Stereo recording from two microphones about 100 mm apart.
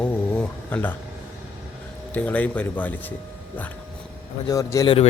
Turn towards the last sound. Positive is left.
turn(degrees=65)  # may be behind; listen again after turning